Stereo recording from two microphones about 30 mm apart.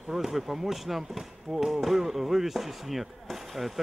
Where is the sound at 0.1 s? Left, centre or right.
Centre.